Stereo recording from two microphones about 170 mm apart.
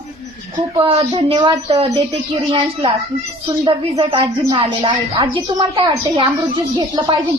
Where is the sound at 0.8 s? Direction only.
30° right (ahead or behind).